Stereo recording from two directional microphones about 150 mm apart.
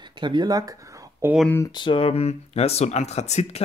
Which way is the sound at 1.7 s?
35° left (ahead or behind).